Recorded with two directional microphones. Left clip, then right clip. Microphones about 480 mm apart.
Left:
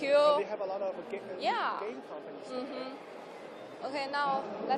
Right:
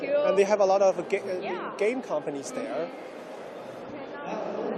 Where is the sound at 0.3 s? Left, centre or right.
Right.